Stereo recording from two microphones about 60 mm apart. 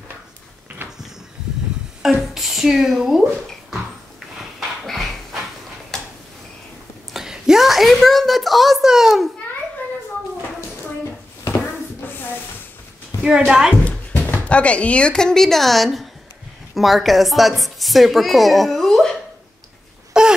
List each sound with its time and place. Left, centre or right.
2.1 s speech: centre
4.6 s a sound: centre
7.2 s a woman's voice: centre
13.5 s a woman's voice: centre
13.8 s speech: left; by 19.1 s centre
20.1 s a sound: centre